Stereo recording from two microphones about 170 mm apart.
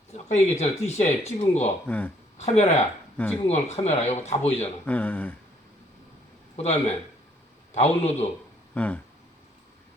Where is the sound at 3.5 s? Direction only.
40° left (ahead or behind).